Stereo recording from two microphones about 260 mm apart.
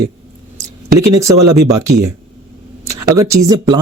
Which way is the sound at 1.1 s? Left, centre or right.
Centre.